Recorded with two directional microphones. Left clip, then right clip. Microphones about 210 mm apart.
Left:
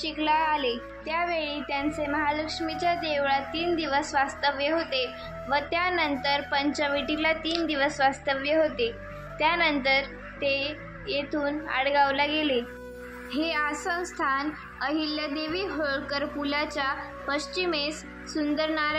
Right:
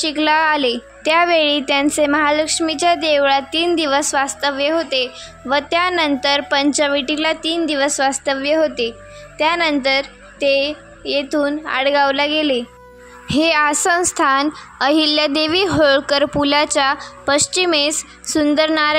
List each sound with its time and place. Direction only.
0.0 s a woman's voice: 50° right (ahead or behind)
13.3 s a woman's voice: 60° right (ahead or behind)